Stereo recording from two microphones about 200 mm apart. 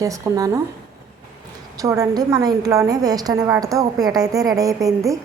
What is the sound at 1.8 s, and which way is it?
A woman's voice, 15° right (ahead or behind).